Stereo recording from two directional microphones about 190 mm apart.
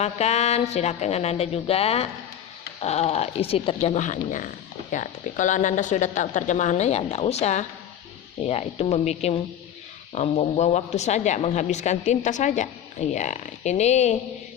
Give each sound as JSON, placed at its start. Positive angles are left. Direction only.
{"t": 0.0, "sound": "speech", "side_deg": 35}